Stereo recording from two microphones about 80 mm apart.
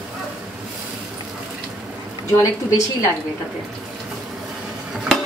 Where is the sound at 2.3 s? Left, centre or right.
Left.